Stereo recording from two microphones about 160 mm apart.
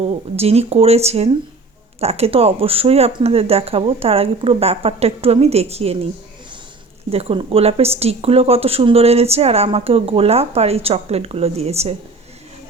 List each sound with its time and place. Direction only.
0.0 s speech: 40° right (ahead or behind)
7.1 s speech: 40° right (ahead or behind)